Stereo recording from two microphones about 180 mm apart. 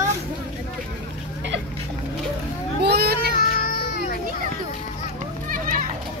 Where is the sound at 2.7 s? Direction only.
65° right (ahead or behind).